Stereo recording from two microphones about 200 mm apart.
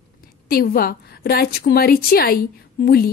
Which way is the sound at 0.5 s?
50° left (ahead or behind).